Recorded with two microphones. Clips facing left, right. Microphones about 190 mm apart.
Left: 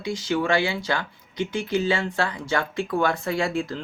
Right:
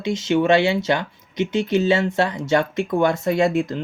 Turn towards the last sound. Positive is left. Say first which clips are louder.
# right 6 dB
turn(degrees=-20)  # may be behind; listen again after turning